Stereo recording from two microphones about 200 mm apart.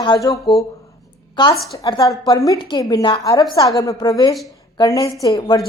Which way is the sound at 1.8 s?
20° left (ahead or behind).